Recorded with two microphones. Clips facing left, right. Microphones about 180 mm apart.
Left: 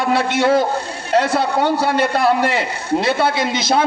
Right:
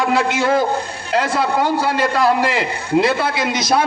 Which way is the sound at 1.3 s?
65° left (ahead or behind).